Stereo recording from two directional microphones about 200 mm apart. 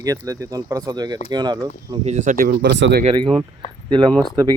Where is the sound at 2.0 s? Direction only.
35° right (ahead or behind); by 3.0 s 60° right (ahead or behind).